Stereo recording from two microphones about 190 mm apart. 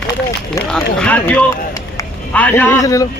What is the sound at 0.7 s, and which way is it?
A man's voice, 5° left (ahead or behind).